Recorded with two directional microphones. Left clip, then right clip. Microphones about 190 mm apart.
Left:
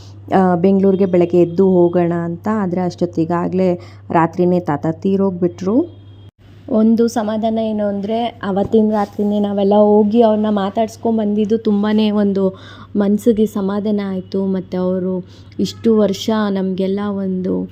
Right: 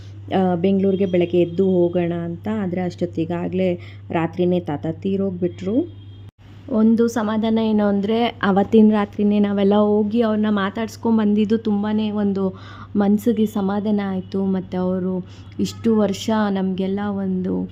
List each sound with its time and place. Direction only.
0.3 s a woman's voice: 20° left (ahead or behind)
1.6 s music: 35° left (ahead or behind)
1.9 s a woman's voice: 15° left (ahead or behind)
6.7 s a woman's voice: 10° left (ahead or behind); by 8.6 s 10° right (ahead or behind)
8.7 s a woman's voice: 30° right (ahead or behind)
9.1 s a woman's voice: 5° right (ahead or behind)
9.9 s a woman's voice: 10° left (ahead or behind)
11.2 s a woman's voice: centre (ahead or behind)
11.8 s a woman's voice: 30° left (ahead or behind); by 17.6 s 10° left (ahead or behind)